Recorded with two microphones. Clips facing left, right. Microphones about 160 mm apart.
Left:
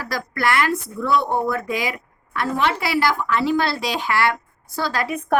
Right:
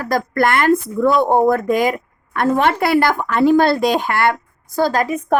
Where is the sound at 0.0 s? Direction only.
50° right (ahead or behind).